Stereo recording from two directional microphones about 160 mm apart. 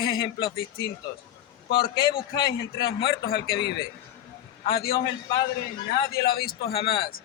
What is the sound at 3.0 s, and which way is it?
A man's voice, 80° left.